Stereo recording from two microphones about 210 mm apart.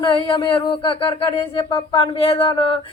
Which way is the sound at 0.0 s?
25° left (ahead or behind).